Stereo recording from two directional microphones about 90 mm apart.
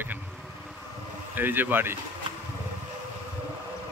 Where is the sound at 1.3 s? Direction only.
20° right (ahead or behind).